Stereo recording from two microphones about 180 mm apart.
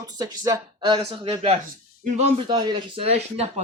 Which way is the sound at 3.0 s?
35° right (ahead or behind).